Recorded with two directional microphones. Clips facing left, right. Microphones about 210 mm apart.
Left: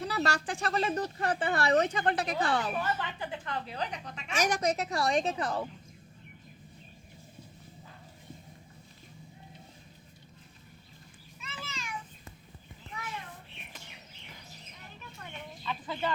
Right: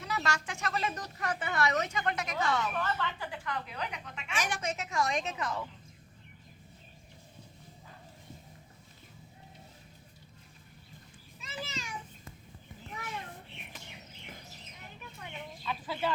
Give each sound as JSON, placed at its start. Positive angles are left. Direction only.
{"t": 0.0, "sound": "speech", "side_deg": 35}
{"t": 2.7, "sound": "speech", "side_deg": 15}
{"t": 11.3, "sound": "children playing", "side_deg": -35}
{"t": 15.2, "sound": "chicken", "side_deg": -5}